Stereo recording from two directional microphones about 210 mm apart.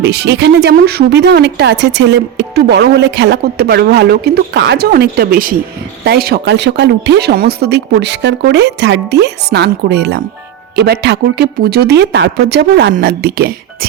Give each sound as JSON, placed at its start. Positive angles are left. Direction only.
{"t": 0.0, "sound": "speech", "side_deg": -50}